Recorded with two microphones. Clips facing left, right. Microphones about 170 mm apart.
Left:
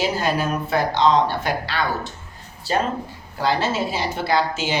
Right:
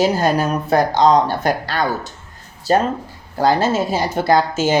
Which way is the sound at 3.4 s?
45° right (ahead or behind).